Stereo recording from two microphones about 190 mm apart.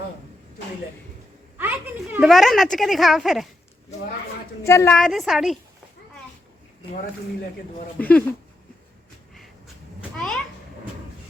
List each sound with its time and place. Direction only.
1.5 s a woman's voice: 10° right (ahead or behind)
4.6 s a woman's voice: 15° left (ahead or behind); by 5.5 s centre (ahead or behind)
7.9 s speech: 10° left (ahead or behind)
10.2 s a sound: 5° left (ahead or behind)